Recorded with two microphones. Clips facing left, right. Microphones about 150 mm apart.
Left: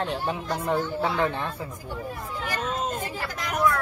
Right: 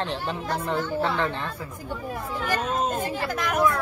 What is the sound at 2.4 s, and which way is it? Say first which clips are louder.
Speech: right 3 dB; 50° right (ahead or behind).